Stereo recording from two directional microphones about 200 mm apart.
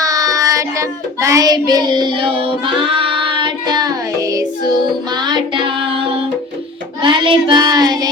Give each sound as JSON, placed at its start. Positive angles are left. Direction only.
{"t": 0.0, "sound": "child singing", "side_deg": -15}
{"t": 4.8, "sound": "music", "side_deg": -20}
{"t": 7.0, "sound": "child singing", "side_deg": -25}